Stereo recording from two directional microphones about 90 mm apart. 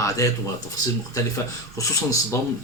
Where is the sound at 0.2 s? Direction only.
40° left (ahead or behind).